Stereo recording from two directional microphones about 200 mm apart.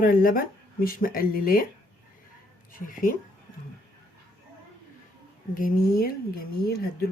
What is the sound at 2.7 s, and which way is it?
Speech, 40° left (ahead or behind).